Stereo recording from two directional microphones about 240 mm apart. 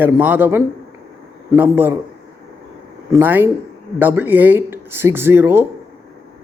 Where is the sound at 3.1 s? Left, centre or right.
Centre.